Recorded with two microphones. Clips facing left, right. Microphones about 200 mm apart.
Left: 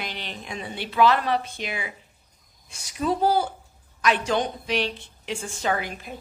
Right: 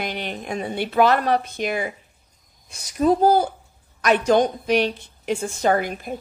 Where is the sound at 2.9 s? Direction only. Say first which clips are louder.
Right 6 dB; 45° right (ahead or behind).